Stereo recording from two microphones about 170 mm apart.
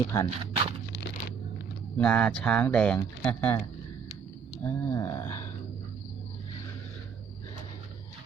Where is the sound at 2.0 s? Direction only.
5° left (ahead or behind).